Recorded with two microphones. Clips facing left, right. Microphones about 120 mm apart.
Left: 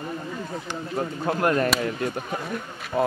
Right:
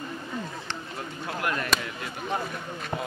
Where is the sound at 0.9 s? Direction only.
45° left (ahead or behind).